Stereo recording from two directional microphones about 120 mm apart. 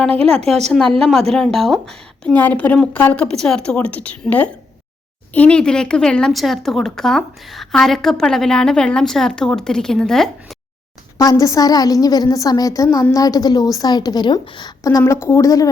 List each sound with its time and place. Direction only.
0.0 s speech: 5° left (ahead or behind)
11.2 s a woman's voice: 30° left (ahead or behind)